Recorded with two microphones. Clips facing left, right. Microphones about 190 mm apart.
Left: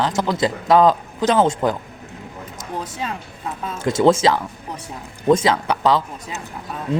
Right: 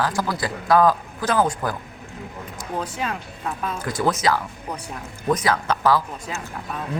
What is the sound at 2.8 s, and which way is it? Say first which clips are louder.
Speech: right 1 dB; 20° left (ahead or behind).